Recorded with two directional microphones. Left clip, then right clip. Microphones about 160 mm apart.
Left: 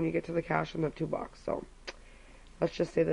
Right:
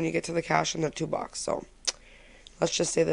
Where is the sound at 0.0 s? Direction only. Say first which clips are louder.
Right 3 dB; 35° right (ahead or behind).